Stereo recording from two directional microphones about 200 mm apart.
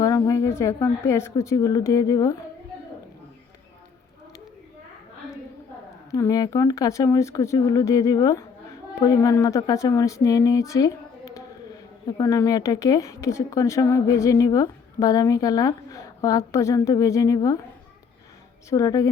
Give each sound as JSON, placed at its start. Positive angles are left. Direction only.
{"t": 0.0, "sound": "a woman's voice", "side_deg": 15}
{"t": 6.1, "sound": "speech", "side_deg": 15}
{"t": 18.7, "sound": "speech", "side_deg": 15}